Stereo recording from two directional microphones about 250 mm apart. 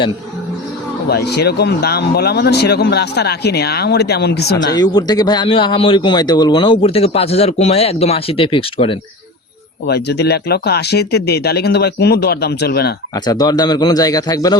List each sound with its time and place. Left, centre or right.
1.0 s speech: left
4.8 s a man's voice: centre
9.8 s speech: left
13.1 s a man's voice: centre